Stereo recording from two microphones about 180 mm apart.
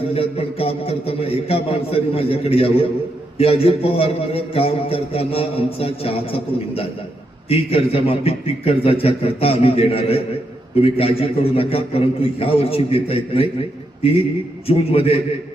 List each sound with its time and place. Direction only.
0.1 s a man's voice: 30° left (ahead or behind)
14.7 s a man's voice: 35° left (ahead or behind)